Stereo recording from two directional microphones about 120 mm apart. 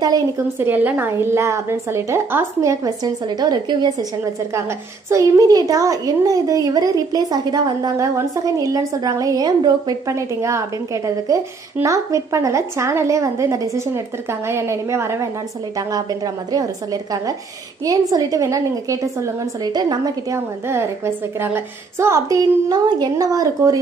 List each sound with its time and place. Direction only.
0.6 s a woman's voice: 15° right (ahead or behind); by 3.9 s 35° right (ahead or behind)
5.1 s a woman's voice: 30° right (ahead or behind)
11.8 s a woman's voice: 25° right (ahead or behind)
16.5 s a woman's voice: 30° right (ahead or behind)
20.3 s a woman's voice: 20° right (ahead or behind)